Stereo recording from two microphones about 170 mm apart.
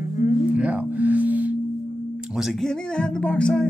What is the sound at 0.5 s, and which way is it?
Music, 10° right (ahead or behind).